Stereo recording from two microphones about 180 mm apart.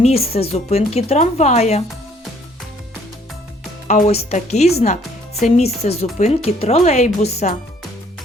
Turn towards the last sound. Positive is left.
turn(degrees=35)  # may be behind; listen again after turning